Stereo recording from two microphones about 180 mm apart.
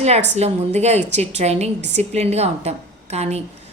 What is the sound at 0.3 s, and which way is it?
A woman's voice, 35° right (ahead or behind).